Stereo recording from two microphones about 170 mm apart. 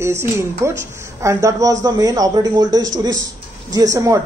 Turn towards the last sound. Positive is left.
turn(degrees=-20)  # may be behind; listen again after turning